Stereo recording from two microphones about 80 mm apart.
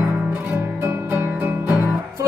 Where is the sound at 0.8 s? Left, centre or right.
Right.